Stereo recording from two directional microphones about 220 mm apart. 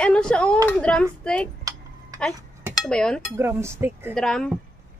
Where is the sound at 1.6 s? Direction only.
15° right (ahead or behind).